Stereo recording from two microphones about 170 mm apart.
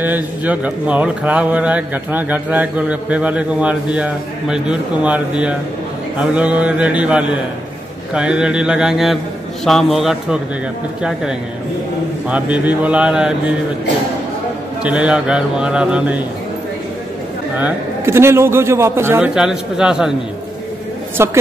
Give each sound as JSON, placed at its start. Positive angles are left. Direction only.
{"t": 0.0, "sound": "a man's voice", "side_deg": -10}
{"t": 14.8, "sound": "a man's voice", "side_deg": -5}
{"t": 17.6, "sound": "speech", "side_deg": -10}
{"t": 21.2, "sound": "speech", "side_deg": -15}